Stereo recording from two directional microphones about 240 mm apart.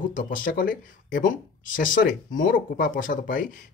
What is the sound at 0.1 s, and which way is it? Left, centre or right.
Speech, left.